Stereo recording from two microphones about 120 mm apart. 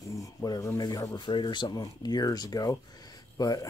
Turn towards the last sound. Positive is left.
turn(degrees=30)  # may be behind; listen again after turning